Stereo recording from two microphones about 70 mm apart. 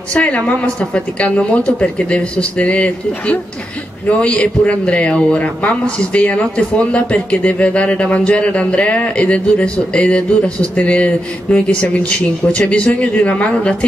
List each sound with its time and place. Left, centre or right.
0.1 s speech: centre